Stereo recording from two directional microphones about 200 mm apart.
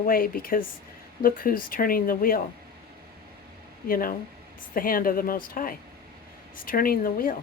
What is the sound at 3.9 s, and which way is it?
Speech, 45° left (ahead or behind).